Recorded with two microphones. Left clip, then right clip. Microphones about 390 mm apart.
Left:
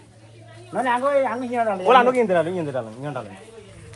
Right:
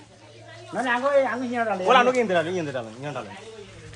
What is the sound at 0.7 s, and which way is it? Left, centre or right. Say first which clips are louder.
Speech: left 2 dB; centre.